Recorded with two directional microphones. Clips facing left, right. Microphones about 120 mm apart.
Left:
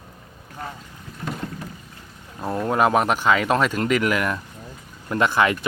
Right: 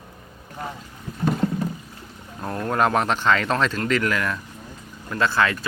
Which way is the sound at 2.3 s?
10° left (ahead or behind).